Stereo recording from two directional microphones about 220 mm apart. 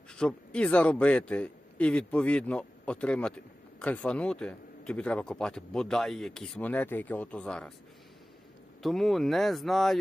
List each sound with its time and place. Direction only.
0.1 s a man's voice: 5° left (ahead or behind)
8.8 s a man's voice: centre (ahead or behind)